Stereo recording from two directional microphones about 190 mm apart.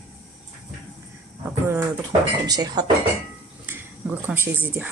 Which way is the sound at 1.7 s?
20° right (ahead or behind).